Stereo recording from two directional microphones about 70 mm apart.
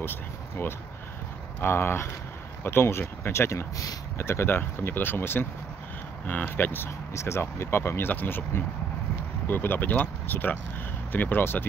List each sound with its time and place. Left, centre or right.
0.0 s speech: left